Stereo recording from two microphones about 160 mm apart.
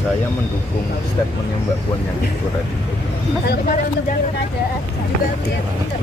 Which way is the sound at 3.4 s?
70° left (ahead or behind).